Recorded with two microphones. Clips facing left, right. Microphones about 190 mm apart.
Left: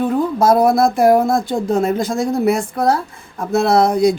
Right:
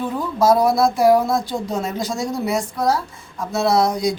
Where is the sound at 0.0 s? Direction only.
55° left (ahead or behind).